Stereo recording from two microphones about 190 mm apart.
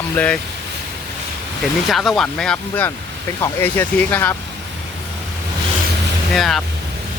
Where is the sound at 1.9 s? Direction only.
Centre (ahead or behind).